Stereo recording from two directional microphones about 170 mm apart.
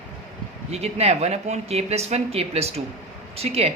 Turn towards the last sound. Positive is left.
turn(degrees=-35)  # may be behind; listen again after turning